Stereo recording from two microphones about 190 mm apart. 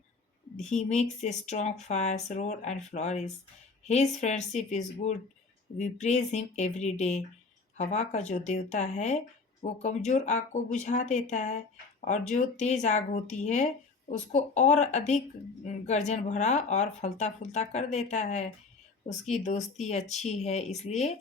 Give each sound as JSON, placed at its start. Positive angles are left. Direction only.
{"t": 0.5, "sound": "speech", "side_deg": 40}